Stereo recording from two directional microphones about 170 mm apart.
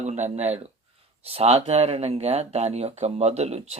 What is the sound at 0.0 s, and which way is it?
Speech, 40° right (ahead or behind).